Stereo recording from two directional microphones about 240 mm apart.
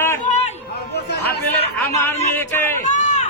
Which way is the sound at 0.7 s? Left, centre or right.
Left.